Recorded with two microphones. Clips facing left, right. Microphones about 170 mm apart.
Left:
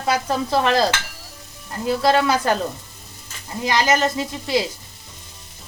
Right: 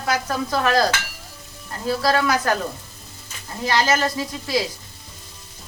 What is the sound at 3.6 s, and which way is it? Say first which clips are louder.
Stir: left 1 dB; 15° left (ahead or behind).